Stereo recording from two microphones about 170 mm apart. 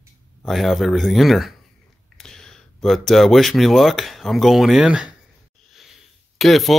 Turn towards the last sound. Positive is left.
turn(degrees=0)  # may be behind; listen again after turning